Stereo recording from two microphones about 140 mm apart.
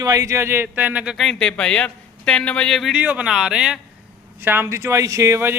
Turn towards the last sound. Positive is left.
turn(degrees=-20)  # may be behind; listen again after turning